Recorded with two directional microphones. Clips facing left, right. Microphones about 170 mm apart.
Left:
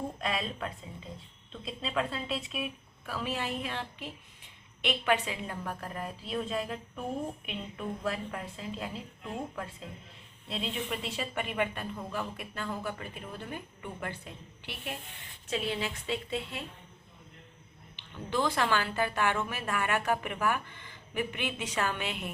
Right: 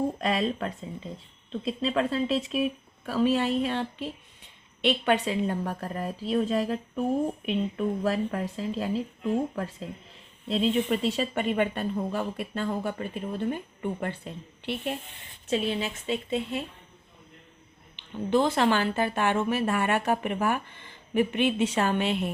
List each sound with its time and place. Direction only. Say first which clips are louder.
0.2 s a woman's voice: right 7 dB; 40° right (ahead or behind); by 16.6 s 20° right (ahead or behind)
18.3 s a woman's voice: right 6 dB; 25° right (ahead or behind)